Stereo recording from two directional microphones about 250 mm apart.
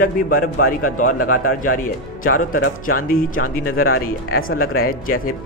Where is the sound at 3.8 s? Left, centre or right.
Left.